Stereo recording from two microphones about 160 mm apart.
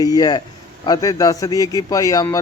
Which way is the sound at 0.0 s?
25° left (ahead or behind).